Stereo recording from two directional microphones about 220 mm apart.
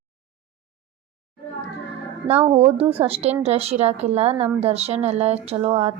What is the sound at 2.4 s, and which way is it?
A woman's voice, 25° right (ahead or behind).